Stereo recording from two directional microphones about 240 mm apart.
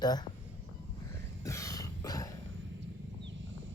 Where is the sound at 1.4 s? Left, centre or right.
Centre.